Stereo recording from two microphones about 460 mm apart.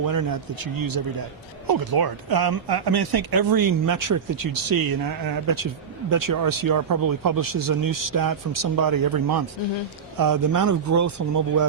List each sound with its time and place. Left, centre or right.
0.0 s a man's voice: right